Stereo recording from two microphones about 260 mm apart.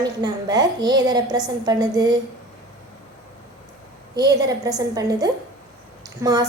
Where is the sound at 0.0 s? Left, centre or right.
Centre.